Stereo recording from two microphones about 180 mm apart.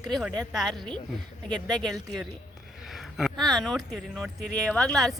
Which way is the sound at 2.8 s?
Centre (ahead or behind).